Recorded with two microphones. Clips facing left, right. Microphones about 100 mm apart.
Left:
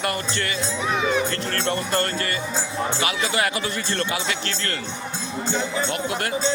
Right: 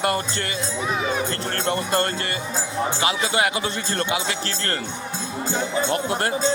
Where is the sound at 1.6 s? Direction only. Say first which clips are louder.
Right 2 dB; 25° right (ahead or behind).